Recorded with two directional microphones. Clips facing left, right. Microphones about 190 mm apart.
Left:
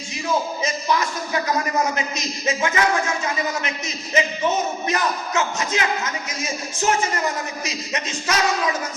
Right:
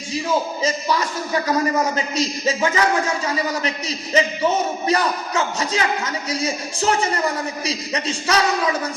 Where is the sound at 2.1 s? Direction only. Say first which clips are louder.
Right 4 dB; 35° right (ahead or behind).